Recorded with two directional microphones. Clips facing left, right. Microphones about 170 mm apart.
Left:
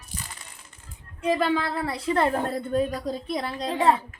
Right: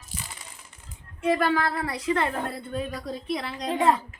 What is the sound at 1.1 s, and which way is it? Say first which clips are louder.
A woman's voice: even; 20° left (ahead or behind).